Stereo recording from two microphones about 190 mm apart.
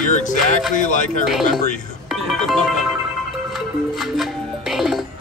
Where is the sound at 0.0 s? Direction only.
40° left (ahead or behind).